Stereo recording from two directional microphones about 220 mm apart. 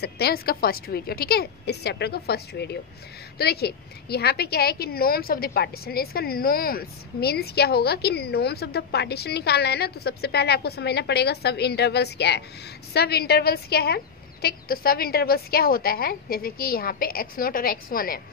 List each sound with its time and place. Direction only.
0.0 s a woman's voice: 45° left (ahead or behind)